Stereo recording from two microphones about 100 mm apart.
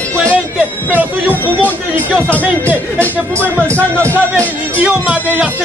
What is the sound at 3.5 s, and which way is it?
Music, 15° left (ahead or behind).